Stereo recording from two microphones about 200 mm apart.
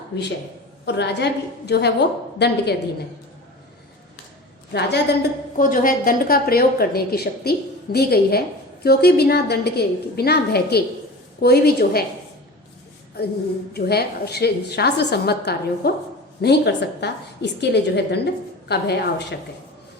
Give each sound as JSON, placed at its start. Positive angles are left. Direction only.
{"t": 0.1, "sound": "a woman's voice", "side_deg": 60}
{"t": 4.7, "sound": "a woman's voice", "side_deg": 55}
{"t": 13.7, "sound": "a woman's voice", "side_deg": 55}